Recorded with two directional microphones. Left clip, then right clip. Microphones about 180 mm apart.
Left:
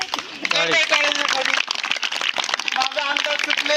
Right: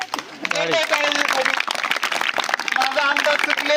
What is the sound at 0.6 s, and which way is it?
Speech, 30° right (ahead or behind).